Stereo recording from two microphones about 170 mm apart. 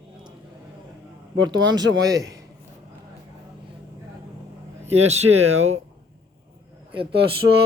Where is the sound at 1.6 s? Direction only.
90° right.